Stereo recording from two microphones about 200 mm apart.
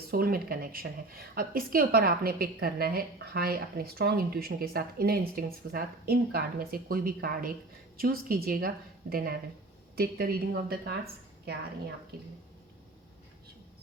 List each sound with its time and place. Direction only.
0.1 s a woman's voice: 45° right (ahead or behind)
12.1 s a woman's voice: 50° right (ahead or behind)